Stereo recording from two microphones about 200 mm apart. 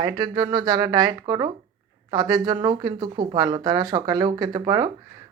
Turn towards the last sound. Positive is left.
turn(degrees=-20)  # may be behind; listen again after turning